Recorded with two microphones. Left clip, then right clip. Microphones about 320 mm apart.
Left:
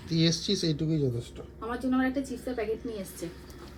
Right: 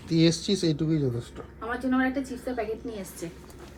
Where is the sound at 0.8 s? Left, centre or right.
Centre.